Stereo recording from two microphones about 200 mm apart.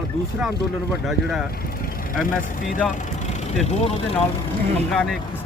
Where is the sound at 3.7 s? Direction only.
30° left (ahead or behind).